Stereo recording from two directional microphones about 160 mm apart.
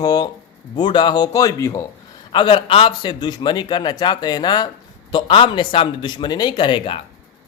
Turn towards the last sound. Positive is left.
turn(degrees=30)  # may be behind; listen again after turning